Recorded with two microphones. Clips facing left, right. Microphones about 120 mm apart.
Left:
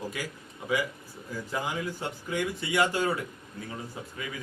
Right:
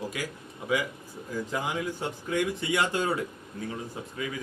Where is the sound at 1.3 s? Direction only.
15° right (ahead or behind).